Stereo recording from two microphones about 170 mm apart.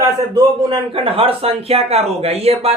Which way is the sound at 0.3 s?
30° right (ahead or behind).